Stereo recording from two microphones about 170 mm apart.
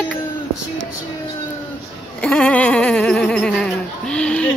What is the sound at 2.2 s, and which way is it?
Speech, 5° left (ahead or behind).